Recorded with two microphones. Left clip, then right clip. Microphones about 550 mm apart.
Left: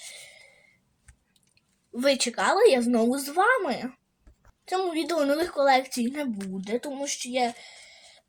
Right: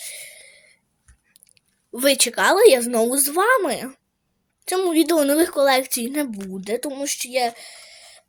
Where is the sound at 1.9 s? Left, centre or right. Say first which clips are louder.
Right 5 dB; right.